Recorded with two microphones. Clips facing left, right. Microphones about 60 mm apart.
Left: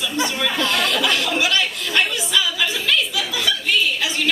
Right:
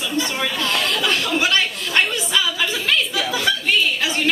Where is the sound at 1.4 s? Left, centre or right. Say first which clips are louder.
Right 1 dB; right.